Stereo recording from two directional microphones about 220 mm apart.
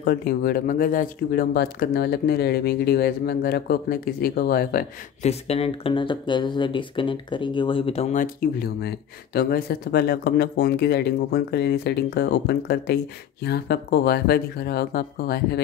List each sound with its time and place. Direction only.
0.0 s speech: 45° left (ahead or behind)
5.2 s speech: 25° left (ahead or behind); by 15.6 s 45° left (ahead or behind)